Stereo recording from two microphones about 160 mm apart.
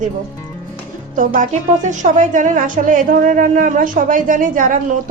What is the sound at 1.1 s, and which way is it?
A woman's voice, 55° right (ahead or behind).